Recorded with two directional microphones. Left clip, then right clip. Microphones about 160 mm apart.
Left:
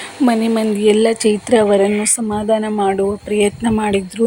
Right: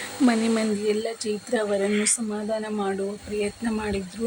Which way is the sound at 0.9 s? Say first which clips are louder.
Left 14 dB; 45° left (ahead or behind).